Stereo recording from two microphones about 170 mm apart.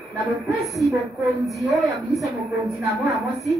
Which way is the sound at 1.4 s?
Centre (ahead or behind).